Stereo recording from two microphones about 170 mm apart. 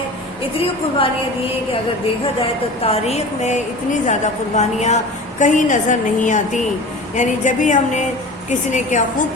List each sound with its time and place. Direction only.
0.6 s a woman's voice: 30° left (ahead or behind)
2.8 s a woman's voice: 40° left (ahead or behind)